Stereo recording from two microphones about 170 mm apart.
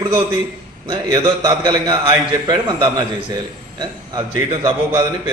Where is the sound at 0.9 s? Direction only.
25° right (ahead or behind).